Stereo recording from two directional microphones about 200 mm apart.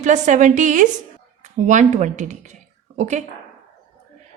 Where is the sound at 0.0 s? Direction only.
35° right (ahead or behind).